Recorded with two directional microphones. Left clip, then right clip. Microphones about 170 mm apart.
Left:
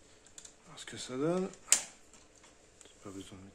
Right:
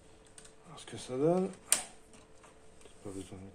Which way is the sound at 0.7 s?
25° left (ahead or behind).